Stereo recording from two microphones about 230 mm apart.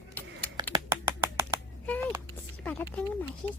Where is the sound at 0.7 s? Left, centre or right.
Centre.